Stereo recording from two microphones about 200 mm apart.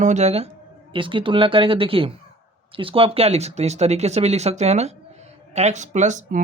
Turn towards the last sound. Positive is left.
turn(degrees=-35)  # may be behind; listen again after turning